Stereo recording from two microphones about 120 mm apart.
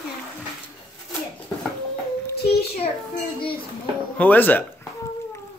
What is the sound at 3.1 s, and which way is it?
Child singing, 45° left (ahead or behind).